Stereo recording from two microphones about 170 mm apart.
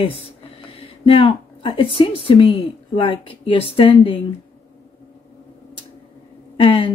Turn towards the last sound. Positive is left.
turn(degrees=30)  # may be behind; listen again after turning